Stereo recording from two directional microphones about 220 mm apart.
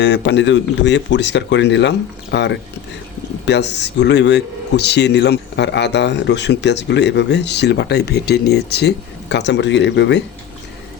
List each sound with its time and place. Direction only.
0.0 s speech: 55° left (ahead or behind)